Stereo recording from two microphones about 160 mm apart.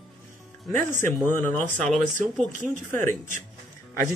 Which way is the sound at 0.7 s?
15° left (ahead or behind).